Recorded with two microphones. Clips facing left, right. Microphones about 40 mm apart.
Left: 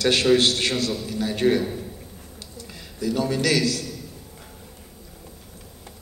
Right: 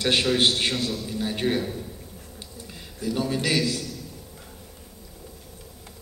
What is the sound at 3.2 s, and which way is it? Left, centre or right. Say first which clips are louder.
Speech: left 3 dB; centre.